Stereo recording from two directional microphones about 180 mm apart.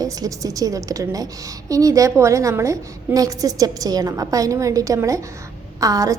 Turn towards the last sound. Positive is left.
turn(degrees=-20)  # may be behind; listen again after turning